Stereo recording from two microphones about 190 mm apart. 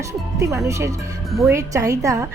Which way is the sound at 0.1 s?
15° right (ahead or behind).